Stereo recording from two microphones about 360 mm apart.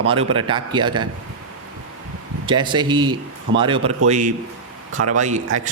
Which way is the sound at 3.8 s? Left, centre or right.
Right.